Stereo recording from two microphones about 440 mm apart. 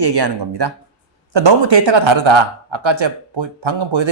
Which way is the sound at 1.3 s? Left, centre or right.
Right.